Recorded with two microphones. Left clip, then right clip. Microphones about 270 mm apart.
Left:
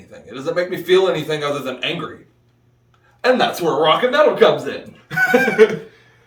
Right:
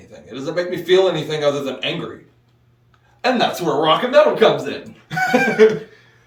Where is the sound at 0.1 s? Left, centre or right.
Centre.